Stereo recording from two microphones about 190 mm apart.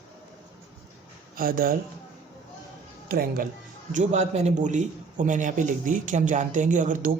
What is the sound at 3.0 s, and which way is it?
Speech, 50° right (ahead or behind).